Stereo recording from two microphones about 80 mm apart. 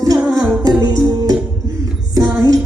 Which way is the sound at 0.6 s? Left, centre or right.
Right.